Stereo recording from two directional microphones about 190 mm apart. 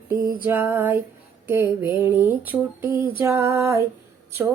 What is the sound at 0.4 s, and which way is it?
Female singing, 10° right (ahead or behind).